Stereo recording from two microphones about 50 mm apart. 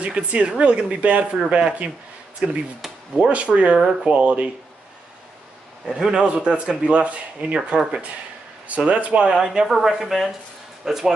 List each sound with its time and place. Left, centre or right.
0.0 s speech: right
2.8 s a sound: centre
3.3 s speech: right
5.9 s speech: centre
6.2 s speech: right
9.3 s speech: centre